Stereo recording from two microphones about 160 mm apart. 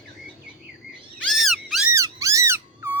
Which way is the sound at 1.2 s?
Centre (ahead or behind).